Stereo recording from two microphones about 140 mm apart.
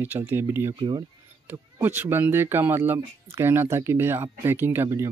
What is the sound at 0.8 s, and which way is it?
Speech, 30° right (ahead or behind).